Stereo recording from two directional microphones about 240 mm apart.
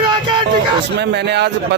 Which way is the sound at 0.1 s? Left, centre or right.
Centre.